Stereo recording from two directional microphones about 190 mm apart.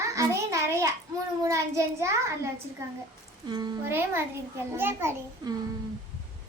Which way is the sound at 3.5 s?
20° right (ahead or behind).